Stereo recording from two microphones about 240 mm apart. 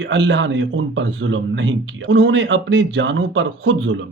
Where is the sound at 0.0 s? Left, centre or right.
Right.